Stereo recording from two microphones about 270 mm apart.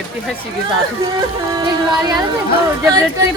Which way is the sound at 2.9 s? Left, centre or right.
Centre.